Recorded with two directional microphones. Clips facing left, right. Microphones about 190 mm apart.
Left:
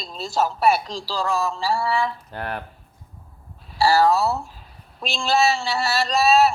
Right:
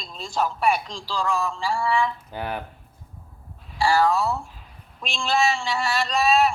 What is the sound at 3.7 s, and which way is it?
A woman's voice, 40° left (ahead or behind).